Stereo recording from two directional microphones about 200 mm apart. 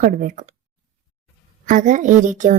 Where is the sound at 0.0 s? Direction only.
40° right (ahead or behind).